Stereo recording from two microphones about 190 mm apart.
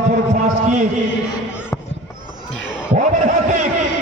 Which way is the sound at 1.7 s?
5° left (ahead or behind).